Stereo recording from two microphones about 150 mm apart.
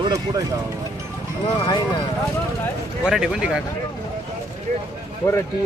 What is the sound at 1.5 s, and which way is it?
Speech, 35° left (ahead or behind).